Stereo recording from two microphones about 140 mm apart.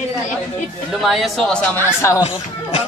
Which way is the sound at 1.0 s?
Centre (ahead or behind).